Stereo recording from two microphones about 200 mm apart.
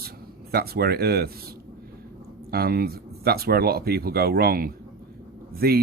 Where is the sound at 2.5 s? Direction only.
50° right (ahead or behind).